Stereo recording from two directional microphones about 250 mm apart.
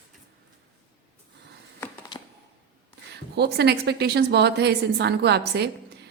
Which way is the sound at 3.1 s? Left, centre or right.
Right.